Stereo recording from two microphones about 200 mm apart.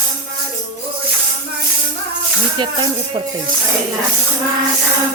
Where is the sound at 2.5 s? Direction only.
25° right (ahead or behind).